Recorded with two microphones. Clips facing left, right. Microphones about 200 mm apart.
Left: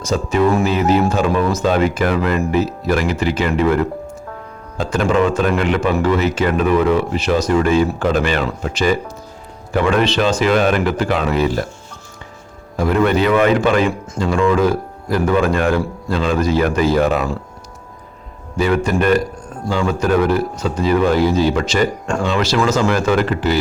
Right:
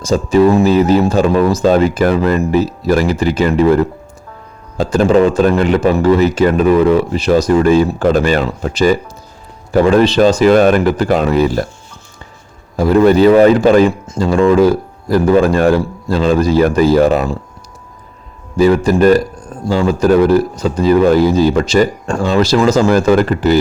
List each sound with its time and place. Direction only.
0.0 s speech: 35° right (ahead or behind)
12.7 s speech: 35° right (ahead or behind)
18.5 s speech: 35° right (ahead or behind)